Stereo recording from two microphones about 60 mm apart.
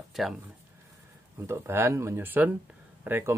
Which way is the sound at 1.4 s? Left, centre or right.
Right.